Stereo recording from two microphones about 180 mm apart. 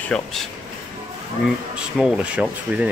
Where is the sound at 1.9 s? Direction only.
Centre (ahead or behind).